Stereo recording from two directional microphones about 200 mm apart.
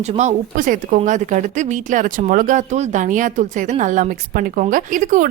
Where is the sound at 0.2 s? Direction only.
40° right (ahead or behind).